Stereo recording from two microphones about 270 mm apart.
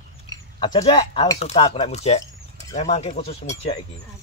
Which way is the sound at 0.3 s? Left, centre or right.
Centre.